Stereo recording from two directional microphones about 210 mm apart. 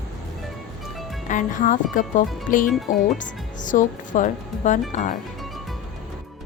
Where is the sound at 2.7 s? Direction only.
Centre (ahead or behind).